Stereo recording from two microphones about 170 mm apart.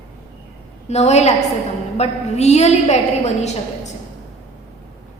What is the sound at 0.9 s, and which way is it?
A woman's voice, 40° left (ahead or behind).